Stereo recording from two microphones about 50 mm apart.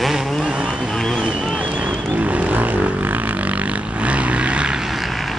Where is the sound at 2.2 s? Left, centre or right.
Right.